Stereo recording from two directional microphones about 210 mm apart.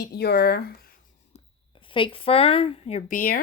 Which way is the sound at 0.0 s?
50° left (ahead or behind).